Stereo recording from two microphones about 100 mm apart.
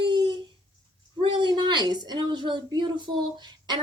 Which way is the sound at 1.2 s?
50° right (ahead or behind).